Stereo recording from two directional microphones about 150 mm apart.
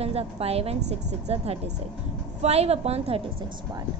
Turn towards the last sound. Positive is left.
turn(degrees=-40)  # may be behind; listen again after turning